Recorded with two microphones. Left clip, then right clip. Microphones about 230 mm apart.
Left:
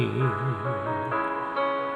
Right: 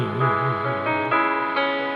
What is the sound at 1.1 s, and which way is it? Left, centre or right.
Music, right.